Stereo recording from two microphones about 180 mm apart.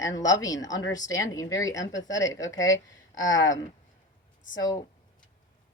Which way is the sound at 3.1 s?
90° left.